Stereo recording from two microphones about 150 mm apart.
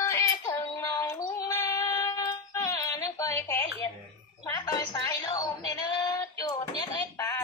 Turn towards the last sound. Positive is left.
turn(degrees=20)  # may be behind; listen again after turning